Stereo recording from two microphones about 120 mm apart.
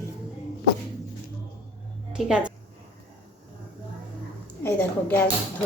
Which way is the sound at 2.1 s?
5° right (ahead or behind).